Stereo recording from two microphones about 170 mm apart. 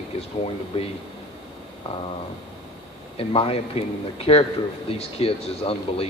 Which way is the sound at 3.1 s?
35° left (ahead or behind).